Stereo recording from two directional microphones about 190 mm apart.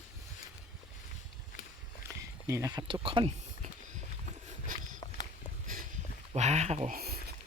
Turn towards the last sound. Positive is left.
turn(degrees=-50)  # may be behind; listen again after turning